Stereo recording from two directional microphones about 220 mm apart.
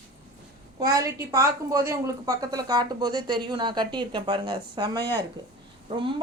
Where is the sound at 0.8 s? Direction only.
15° right (ahead or behind).